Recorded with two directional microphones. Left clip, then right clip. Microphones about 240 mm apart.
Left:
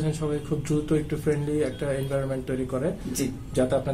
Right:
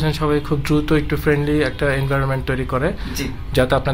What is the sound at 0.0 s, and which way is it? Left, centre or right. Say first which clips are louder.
Speech: right 10 dB; right.